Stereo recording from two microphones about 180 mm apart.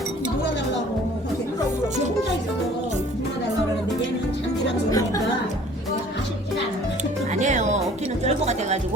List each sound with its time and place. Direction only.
4.9 s speech: 20° left (ahead or behind)
7.3 s music: 40° right (ahead or behind)
8.2 s speech: 40° right (ahead or behind)